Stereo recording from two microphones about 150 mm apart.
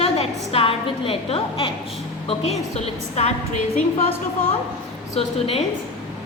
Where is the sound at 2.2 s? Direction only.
45° left (ahead or behind).